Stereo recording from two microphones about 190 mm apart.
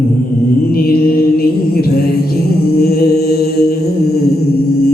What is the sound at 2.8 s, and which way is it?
Mantra, 55° left (ahead or behind).